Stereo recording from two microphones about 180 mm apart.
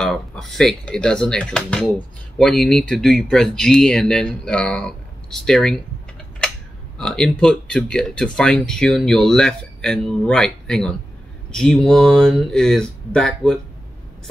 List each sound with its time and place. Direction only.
0.0 s speech: centre (ahead or behind)
7.0 s speech: 5° left (ahead or behind)